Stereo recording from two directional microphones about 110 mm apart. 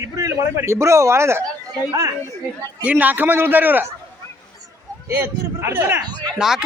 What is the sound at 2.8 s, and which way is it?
A man's voice, 15° right (ahead or behind).